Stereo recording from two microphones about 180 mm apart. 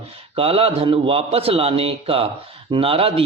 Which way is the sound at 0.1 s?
30° right (ahead or behind).